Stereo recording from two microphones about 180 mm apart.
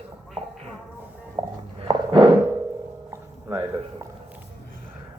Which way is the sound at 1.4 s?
25° right (ahead or behind).